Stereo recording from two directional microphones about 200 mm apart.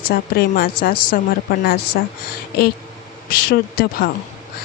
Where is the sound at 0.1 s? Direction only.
45° left (ahead or behind).